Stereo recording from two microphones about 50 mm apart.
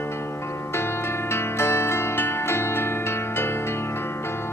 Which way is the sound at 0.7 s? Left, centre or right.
Left.